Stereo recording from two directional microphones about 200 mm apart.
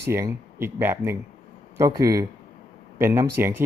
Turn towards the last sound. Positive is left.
turn(degrees=-10)  # may be behind; listen again after turning